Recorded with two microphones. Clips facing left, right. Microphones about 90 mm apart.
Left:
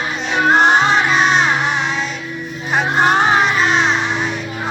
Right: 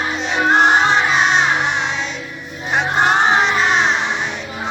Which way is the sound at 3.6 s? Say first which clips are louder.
Left 1 dB; 20° right (ahead or behind).